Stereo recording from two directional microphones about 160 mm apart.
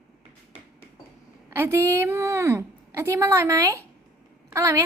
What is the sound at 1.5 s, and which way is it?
A woman's voice, 15° right (ahead or behind).